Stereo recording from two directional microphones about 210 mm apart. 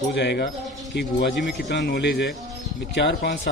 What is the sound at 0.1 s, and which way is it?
Speech, 55° left (ahead or behind).